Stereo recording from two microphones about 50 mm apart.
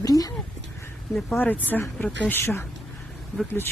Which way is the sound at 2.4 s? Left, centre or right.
Left.